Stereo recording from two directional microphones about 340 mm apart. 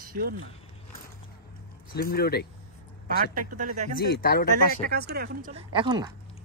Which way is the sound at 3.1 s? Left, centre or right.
Right.